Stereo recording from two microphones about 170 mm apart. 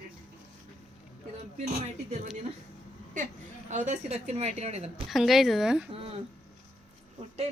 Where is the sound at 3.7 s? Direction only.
45° right (ahead or behind).